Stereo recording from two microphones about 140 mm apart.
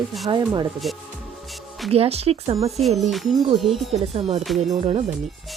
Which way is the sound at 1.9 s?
45° right (ahead or behind).